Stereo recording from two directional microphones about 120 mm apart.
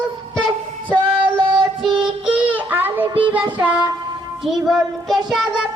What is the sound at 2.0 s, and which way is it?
Child singing, 10° right (ahead or behind).